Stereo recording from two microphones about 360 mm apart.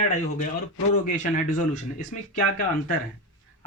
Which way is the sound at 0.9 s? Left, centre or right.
Left.